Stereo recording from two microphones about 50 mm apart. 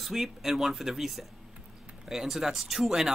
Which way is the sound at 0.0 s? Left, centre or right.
Centre.